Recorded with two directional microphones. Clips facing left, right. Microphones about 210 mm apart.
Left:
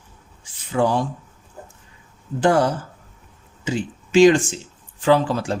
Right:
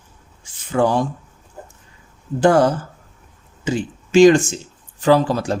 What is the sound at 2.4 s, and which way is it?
Speech, 45° right (ahead or behind).